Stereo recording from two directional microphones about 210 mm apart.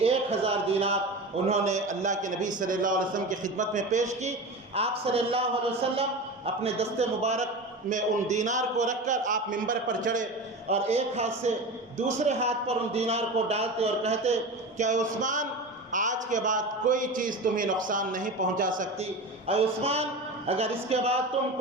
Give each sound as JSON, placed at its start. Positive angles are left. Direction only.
{"t": 0.0, "sound": "a man's voice", "side_deg": -30}
{"t": 19.5, "sound": "a woman's voice", "side_deg": -30}